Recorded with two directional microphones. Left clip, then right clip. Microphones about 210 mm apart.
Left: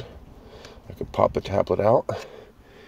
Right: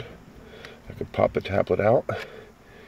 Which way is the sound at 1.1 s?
10° left (ahead or behind).